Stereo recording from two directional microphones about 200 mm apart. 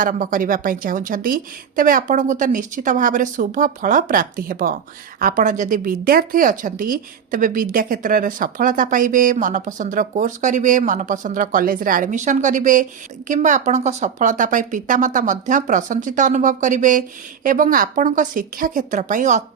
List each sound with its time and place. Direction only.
0.0 s a woman's voice: 40° right (ahead or behind)